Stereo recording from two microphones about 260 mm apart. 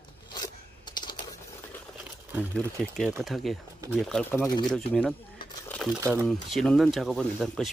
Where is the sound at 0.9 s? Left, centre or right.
Centre.